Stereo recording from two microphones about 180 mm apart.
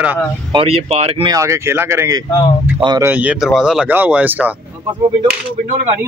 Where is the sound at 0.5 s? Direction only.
35° right (ahead or behind).